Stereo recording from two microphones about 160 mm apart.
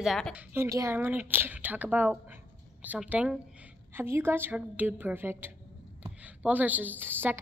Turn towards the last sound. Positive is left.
turn(degrees=-15)  # may be behind; listen again after turning